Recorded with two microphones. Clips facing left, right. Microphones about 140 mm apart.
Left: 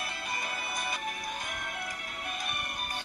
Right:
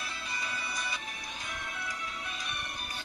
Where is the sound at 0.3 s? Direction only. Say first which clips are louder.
Left 2 dB; 55° left (ahead or behind).